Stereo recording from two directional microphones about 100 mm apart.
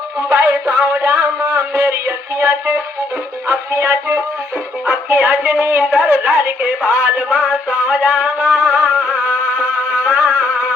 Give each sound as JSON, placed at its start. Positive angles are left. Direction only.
{"t": 0.3, "sound": "a man's voice", "side_deg": -35}
{"t": 4.9, "sound": "music", "side_deg": -25}